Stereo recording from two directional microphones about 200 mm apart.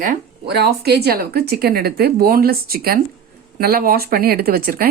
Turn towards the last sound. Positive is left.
turn(degrees=-50)  # may be behind; listen again after turning